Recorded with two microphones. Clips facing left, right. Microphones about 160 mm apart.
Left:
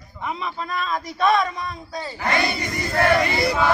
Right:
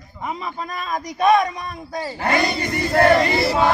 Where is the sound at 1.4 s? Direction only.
50° right (ahead or behind).